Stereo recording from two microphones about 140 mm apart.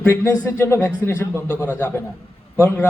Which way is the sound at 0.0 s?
15° left (ahead or behind).